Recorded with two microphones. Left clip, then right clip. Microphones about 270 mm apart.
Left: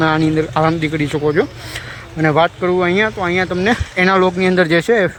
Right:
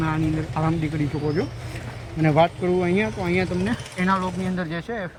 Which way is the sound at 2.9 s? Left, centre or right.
Centre.